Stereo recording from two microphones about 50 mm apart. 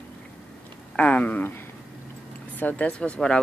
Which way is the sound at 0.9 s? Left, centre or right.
Left.